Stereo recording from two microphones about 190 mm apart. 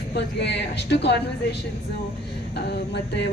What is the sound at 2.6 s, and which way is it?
Speech, 60° left (ahead or behind).